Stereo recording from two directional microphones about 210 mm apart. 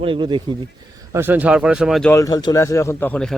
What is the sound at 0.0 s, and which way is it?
Speech, 25° right (ahead or behind).